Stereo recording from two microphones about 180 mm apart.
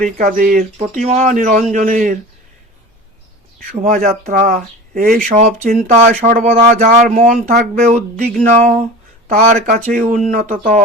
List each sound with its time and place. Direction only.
0.0 s speech: 50° right (ahead or behind)
0.8 s speech: 40° right (ahead or behind)
3.8 s speech: 45° right (ahead or behind)